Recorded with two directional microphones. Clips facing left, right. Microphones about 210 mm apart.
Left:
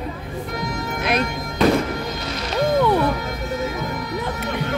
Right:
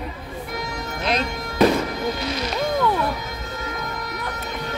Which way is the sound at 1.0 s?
55° left (ahead or behind).